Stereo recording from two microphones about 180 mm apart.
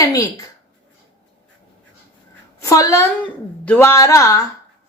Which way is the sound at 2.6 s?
20° left (ahead or behind).